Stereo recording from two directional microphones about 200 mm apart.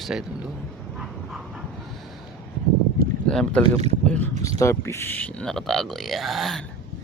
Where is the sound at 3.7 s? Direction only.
30° right (ahead or behind).